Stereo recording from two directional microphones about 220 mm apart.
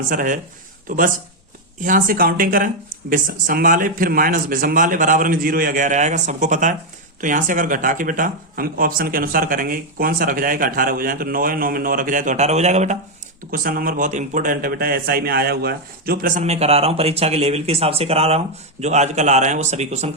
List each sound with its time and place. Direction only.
0.1 s a man's voice: 35° right (ahead or behind)
13.5 s a man's voice: 40° right (ahead or behind)